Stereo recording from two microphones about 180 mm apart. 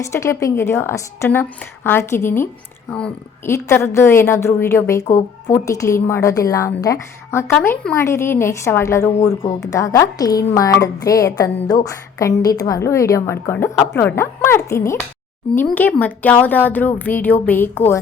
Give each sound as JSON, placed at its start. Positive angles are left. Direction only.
{"t": 0.0, "sound": "a woman's voice", "side_deg": 15}